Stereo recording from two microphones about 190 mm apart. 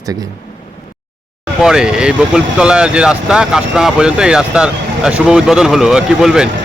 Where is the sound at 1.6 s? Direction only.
5° right (ahead or behind).